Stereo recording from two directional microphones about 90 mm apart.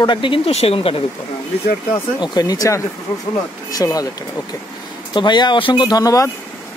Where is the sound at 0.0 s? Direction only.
65° left (ahead or behind); by 1.0 s 90° left.